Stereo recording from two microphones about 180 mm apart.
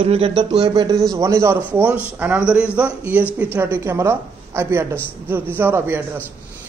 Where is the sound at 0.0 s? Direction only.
30° right (ahead or behind).